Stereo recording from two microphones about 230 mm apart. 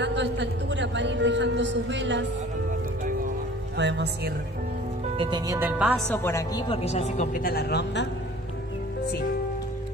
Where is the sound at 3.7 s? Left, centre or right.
Right.